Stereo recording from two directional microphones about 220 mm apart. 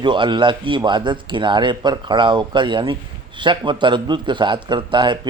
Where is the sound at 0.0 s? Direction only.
20° right (ahead or behind).